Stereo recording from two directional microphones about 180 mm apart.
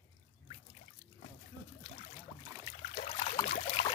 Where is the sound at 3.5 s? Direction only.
40° left (ahead or behind).